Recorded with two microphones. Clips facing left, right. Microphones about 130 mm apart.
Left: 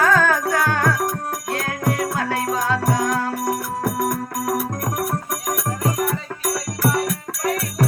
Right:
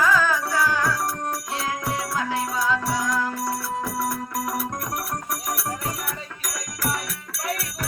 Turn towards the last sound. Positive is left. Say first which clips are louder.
# left 8 dB
turn(degrees=40)  # may be behind; listen again after turning